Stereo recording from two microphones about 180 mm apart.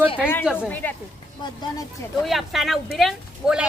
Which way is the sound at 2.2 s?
Centre (ahead or behind).